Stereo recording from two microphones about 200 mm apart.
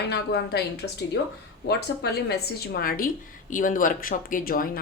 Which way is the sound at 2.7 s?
45° left (ahead or behind).